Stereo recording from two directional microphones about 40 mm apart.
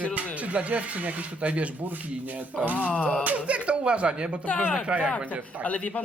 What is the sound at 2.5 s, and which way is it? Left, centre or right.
Speech, centre.